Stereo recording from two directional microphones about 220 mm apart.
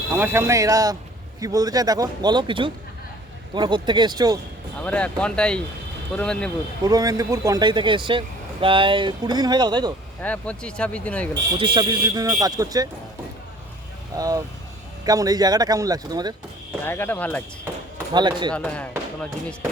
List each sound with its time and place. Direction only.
0.1 s speech: 10° right (ahead or behind)
4.8 s speech: 5° left (ahead or behind)
6.8 s speech: 15° right (ahead or behind)
10.2 s speech: 5° left (ahead or behind)
11.6 s speech: 20° right (ahead or behind)
14.2 s speech: 15° right (ahead or behind)
16.8 s speech: 10° left (ahead or behind)
17.9 s speech: 20° right (ahead or behind)
18.5 s speech: 5° left (ahead or behind)